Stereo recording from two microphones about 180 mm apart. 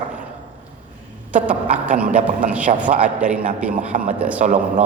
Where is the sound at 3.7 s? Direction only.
45° right (ahead or behind).